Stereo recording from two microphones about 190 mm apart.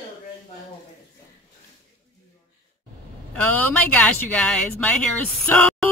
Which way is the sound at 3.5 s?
10° left (ahead or behind).